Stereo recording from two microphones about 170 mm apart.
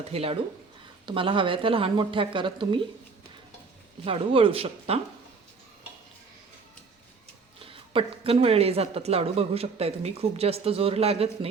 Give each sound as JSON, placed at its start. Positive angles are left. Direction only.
{"t": 0.1, "sound": "a woman's voice", "side_deg": -35}
{"t": 4.0, "sound": "a woman's voice", "side_deg": -35}
{"t": 7.6, "sound": "a woman's voice", "side_deg": -35}